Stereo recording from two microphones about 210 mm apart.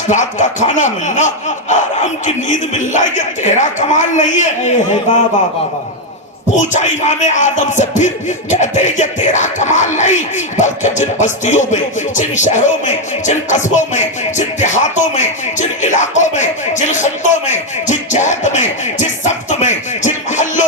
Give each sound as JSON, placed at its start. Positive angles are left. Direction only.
{"t": 0.1, "sound": "music", "side_deg": 35}
{"t": 6.6, "sound": "music", "side_deg": 35}